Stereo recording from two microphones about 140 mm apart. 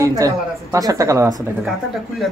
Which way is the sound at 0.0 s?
25° right (ahead or behind).